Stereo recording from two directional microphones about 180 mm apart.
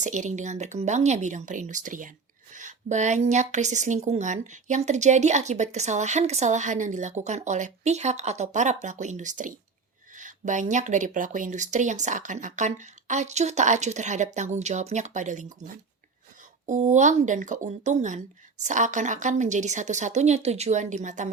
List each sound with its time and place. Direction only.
0.0 s speech: 45° right (ahead or behind)